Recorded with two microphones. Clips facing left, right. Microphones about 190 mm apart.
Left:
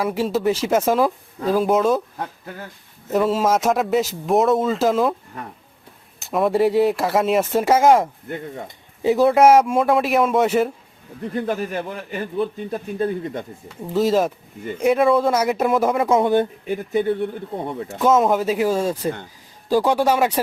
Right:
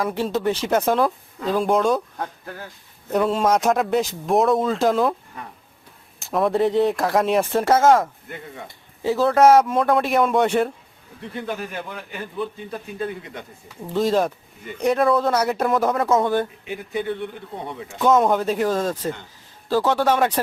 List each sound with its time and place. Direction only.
0.0 s a man's voice: 5° left (ahead or behind)
3.1 s a man's voice: centre (ahead or behind)
6.1 s a man's voice: centre (ahead or behind)
11.2 s a man's voice: 40° left (ahead or behind)
13.9 s a man's voice: 5° left (ahead or behind)
16.6 s speech: 45° left (ahead or behind)
18.0 s a man's voice: 5° left (ahead or behind)